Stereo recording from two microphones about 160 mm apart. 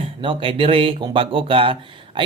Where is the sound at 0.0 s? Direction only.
35° right (ahead or behind).